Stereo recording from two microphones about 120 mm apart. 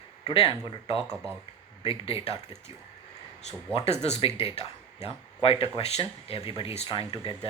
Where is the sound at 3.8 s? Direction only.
60° left (ahead or behind).